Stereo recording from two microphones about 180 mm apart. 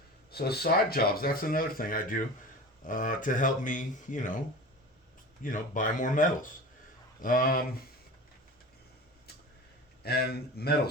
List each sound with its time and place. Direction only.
0.3 s speech: 60° left (ahead or behind)
5.4 s speech: 45° left (ahead or behind)
10.0 s speech: 60° left (ahead or behind)